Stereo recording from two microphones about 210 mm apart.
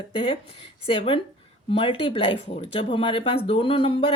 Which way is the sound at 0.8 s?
25° left (ahead or behind).